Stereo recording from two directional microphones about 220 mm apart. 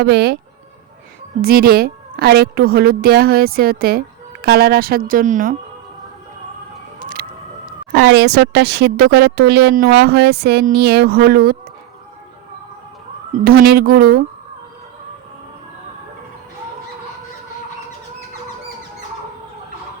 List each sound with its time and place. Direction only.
0.0 s a woman's voice: 45° right (ahead or behind)
1.4 s a woman's voice: 45° right (ahead or behind)
7.0 s emergency vehicle: 40° right (ahead or behind)
7.9 s a woman's voice: 50° right (ahead or behind)
13.4 s a woman's voice: 45° right (ahead or behind)